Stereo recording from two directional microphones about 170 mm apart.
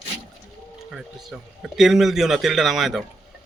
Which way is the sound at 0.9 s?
Centre (ahead or behind).